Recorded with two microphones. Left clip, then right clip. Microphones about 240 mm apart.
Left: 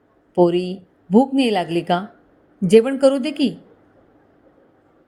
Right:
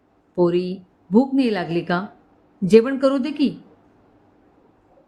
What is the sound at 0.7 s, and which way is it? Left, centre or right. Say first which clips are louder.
A woman's voice: left 2 dB; centre.